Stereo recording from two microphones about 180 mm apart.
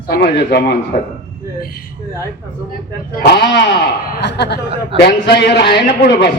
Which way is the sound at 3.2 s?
70° left (ahead or behind).